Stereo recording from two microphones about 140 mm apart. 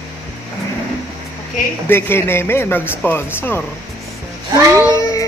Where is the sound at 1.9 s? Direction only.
15° left (ahead or behind).